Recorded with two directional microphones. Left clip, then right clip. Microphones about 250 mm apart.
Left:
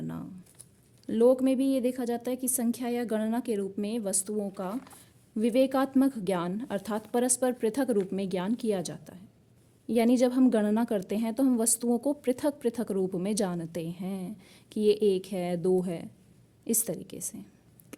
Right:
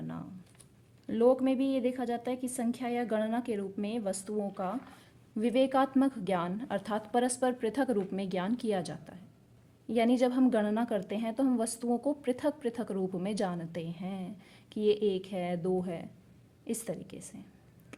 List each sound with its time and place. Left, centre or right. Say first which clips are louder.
1.0 s a woman's voice: left 3 dB; left